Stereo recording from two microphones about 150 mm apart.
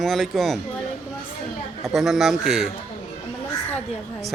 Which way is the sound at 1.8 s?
Centre (ahead or behind).